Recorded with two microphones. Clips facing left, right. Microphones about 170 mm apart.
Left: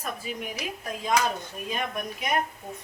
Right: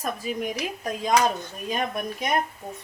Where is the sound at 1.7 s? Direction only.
35° right (ahead or behind).